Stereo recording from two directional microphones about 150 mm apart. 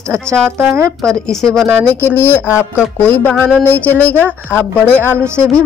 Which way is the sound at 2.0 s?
15° left (ahead or behind).